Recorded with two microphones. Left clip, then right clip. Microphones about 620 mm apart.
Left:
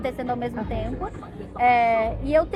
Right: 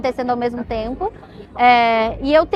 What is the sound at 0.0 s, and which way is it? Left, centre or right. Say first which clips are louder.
A woman's voice: right 8 dB; right.